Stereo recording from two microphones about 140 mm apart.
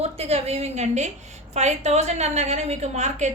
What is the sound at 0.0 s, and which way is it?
A woman's voice, 45° right (ahead or behind).